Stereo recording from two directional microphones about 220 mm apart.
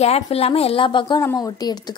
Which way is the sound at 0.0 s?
30° left (ahead or behind).